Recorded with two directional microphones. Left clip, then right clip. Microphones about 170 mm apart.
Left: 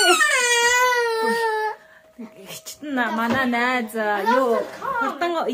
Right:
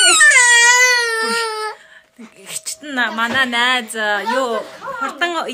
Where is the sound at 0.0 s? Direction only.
5° right (ahead or behind).